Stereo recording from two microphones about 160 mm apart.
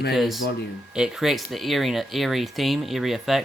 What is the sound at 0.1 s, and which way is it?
Speech, centre (ahead or behind).